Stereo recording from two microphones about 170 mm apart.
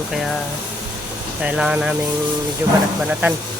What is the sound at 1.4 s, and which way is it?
Speech, 5° right (ahead or behind).